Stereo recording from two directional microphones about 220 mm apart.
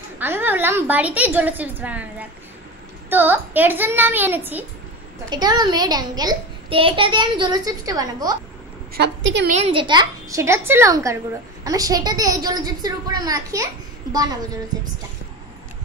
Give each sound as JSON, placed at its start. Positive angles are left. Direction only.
{"t": 0.2, "sound": "a child's voice", "side_deg": -10}
{"t": 8.9, "sound": "a woman's voice", "side_deg": -50}
{"t": 9.5, "sound": "a child's voice", "side_deg": -25}